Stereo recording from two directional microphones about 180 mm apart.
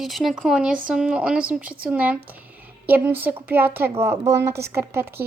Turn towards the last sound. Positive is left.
turn(degrees=-15)  # may be behind; listen again after turning